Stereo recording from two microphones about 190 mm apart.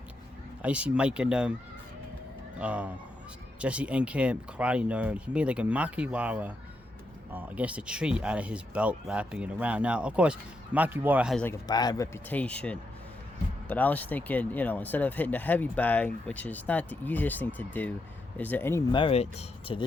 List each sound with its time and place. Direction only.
0.6 s speech: 5° right (ahead or behind)
2.6 s speech: 5° right (ahead or behind)
11.7 s speech: 20° left (ahead or behind)
18.9 s speech: 25° left (ahead or behind)